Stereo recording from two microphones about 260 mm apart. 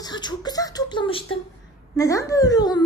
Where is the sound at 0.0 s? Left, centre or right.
Centre.